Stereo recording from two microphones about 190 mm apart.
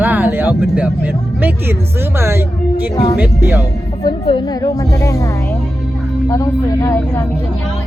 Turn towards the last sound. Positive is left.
turn(degrees=15)  # may be behind; listen again after turning